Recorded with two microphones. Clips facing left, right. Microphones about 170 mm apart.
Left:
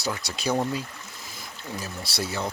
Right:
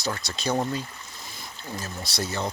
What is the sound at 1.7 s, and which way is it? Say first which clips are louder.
Speech: even; 10° left (ahead or behind).